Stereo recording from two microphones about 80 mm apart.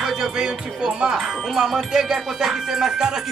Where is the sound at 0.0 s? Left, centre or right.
Centre.